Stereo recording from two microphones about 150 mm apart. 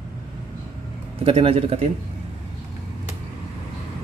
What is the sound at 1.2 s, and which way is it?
Speech, 40° right (ahead or behind).